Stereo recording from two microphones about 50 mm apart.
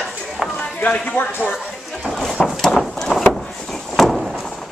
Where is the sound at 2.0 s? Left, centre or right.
Centre.